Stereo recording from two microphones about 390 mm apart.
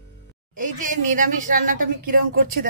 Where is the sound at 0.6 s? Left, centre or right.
Centre.